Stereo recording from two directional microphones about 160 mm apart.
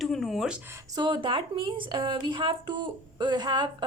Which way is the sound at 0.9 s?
30° right (ahead or behind).